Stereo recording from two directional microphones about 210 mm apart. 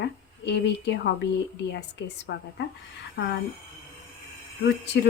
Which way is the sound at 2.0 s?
55° left (ahead or behind).